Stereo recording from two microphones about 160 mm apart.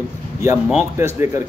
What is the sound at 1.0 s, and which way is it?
Speech, 15° right (ahead or behind).